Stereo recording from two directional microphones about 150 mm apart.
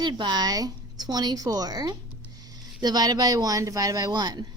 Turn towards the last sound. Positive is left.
turn(degrees=-25)  # may be behind; listen again after turning